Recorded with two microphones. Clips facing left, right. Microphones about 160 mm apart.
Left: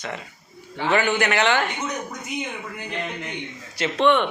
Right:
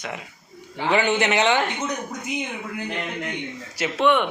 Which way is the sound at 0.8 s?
15° right (ahead or behind).